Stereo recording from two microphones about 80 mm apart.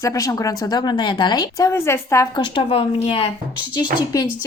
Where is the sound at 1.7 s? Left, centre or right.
Left.